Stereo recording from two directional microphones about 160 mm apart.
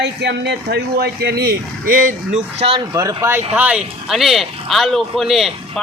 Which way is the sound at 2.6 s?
35° right (ahead or behind).